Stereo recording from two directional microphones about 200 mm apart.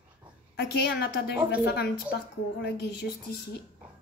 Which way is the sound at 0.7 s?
55° left (ahead or behind).